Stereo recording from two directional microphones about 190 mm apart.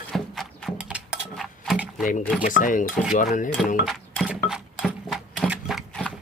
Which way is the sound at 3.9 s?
5° left (ahead or behind).